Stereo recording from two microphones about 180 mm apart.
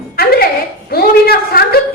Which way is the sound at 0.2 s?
60° left (ahead or behind).